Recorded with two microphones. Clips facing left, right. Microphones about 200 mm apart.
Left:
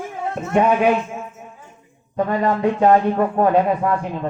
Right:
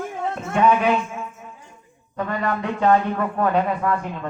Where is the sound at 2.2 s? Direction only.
25° left (ahead or behind).